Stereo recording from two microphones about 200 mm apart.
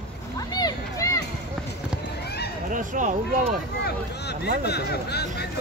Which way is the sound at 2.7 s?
40° right (ahead or behind).